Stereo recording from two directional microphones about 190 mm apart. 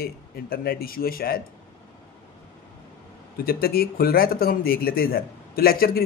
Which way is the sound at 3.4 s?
50° left (ahead or behind).